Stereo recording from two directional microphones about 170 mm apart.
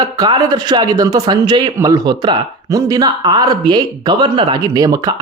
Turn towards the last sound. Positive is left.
turn(degrees=-20)  # may be behind; listen again after turning